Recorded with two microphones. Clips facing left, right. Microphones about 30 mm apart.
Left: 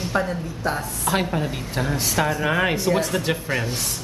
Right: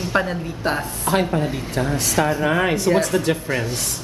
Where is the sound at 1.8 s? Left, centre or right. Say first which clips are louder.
Right 2 dB; centre.